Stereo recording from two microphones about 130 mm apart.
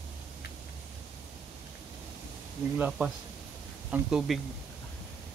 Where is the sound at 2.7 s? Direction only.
10° right (ahead or behind).